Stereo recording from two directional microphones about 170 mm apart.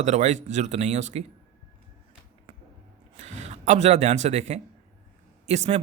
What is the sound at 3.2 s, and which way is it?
Speech, 40° right (ahead or behind).